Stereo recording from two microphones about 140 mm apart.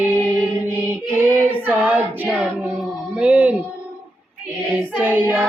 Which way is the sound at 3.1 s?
10° right (ahead or behind).